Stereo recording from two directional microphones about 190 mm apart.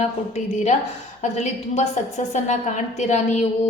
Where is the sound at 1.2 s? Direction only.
35° left (ahead or behind).